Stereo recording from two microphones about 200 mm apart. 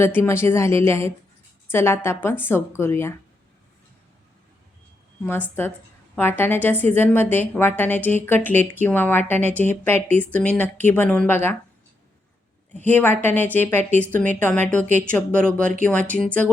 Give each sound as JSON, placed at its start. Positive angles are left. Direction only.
{"t": 0.0, "sound": "a woman's voice", "side_deg": 10}
{"t": 6.1, "sound": "a woman's voice", "side_deg": 10}
{"t": 12.8, "sound": "a woman's voice", "side_deg": 10}
{"t": 15.6, "sound": "speech", "side_deg": -40}
{"t": 16.1, "sound": "speech", "side_deg": 5}